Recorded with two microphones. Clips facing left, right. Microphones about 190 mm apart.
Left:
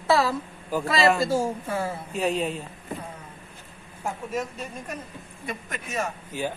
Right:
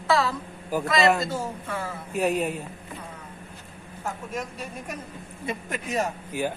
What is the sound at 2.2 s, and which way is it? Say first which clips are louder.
Speech: right 2 dB; 10° right (ahead or behind).